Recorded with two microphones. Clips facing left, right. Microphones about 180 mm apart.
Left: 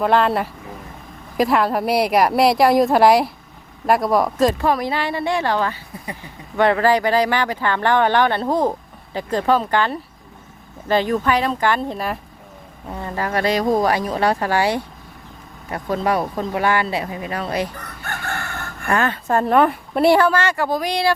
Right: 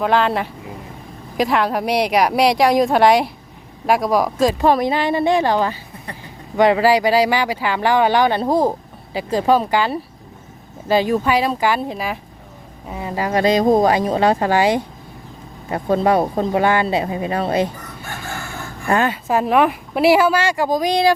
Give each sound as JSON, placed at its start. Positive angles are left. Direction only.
{"t": 0.0, "sound": "a woman's voice", "side_deg": 0}
{"t": 4.6, "sound": "speech", "side_deg": -25}
{"t": 17.7, "sound": "crowing", "side_deg": 65}
{"t": 18.9, "sound": "speech", "side_deg": -10}